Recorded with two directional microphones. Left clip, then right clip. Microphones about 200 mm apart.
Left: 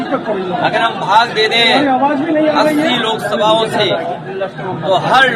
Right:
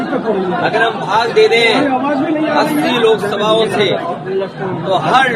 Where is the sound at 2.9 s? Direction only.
15° left (ahead or behind).